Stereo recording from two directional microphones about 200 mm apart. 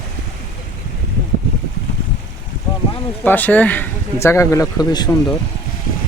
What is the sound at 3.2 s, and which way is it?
Speech, 10° left (ahead or behind).